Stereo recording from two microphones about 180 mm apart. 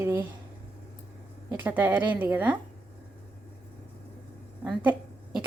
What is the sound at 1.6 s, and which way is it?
Speech, 10° right (ahead or behind).